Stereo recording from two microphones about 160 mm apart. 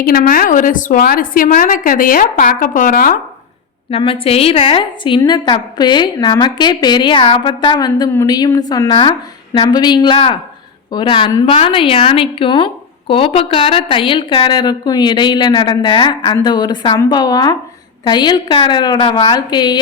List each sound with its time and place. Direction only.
0.0 s a woman's voice: 65° left (ahead or behind)
3.9 s a woman's voice: 35° left (ahead or behind)
11.4 s a woman's voice: 35° left (ahead or behind)